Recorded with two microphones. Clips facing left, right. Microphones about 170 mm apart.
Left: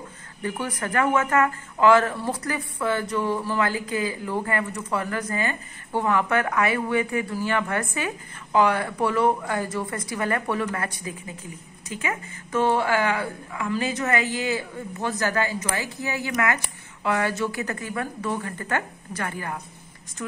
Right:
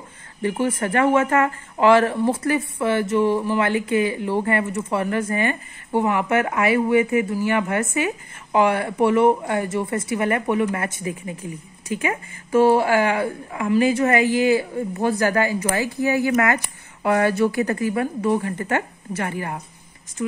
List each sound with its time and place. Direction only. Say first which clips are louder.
0.4 s speech: right 7 dB; 25° right (ahead or behind)
14.1 s a man's voice: right 8 dB; 15° right (ahead or behind)
17.0 s speech: right 6 dB; 35° right (ahead or behind)